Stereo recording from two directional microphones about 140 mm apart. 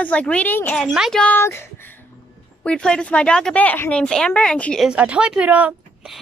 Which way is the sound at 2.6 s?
5° left (ahead or behind).